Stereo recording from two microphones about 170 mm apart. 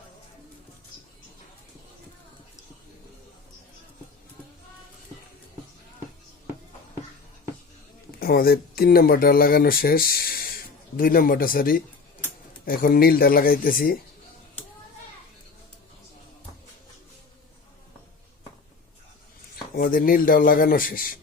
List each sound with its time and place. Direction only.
8.2 s speech: 60° left (ahead or behind)
19.7 s speech: 60° left (ahead or behind)